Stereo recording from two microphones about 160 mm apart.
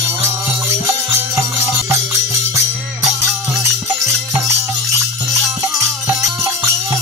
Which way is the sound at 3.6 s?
20° right (ahead or behind).